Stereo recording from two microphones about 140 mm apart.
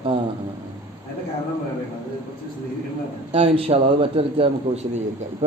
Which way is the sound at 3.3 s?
45° right (ahead or behind).